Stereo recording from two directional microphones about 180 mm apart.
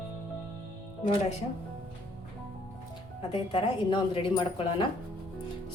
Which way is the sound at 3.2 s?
30° left (ahead or behind).